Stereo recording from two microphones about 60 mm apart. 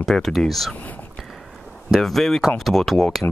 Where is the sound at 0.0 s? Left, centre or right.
Centre.